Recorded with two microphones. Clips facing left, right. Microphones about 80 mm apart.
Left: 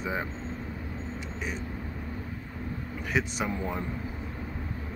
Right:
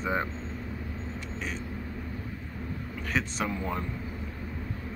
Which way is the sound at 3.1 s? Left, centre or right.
Centre.